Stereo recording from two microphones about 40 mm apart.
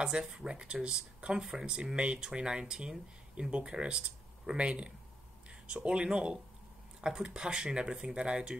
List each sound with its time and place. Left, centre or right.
0.0 s speech: right